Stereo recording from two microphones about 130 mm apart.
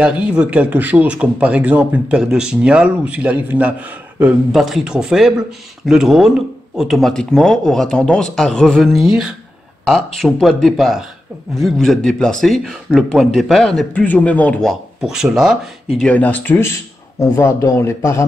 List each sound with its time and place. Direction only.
0.0 s speech: 10° right (ahead or behind)
16.0 s speech: 10° left (ahead or behind)